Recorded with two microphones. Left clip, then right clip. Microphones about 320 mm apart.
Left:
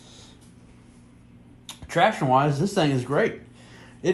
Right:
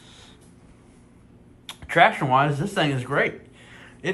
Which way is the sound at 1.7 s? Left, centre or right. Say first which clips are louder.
Right 3 dB; centre.